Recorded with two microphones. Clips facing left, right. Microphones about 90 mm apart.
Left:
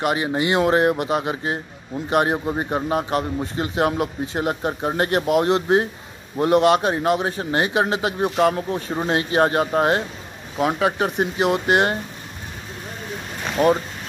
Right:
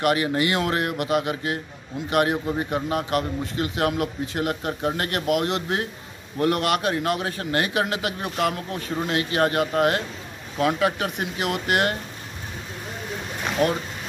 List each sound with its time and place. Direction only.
0.0 s a man's voice: 25° left (ahead or behind)
13.6 s speech: 15° left (ahead or behind)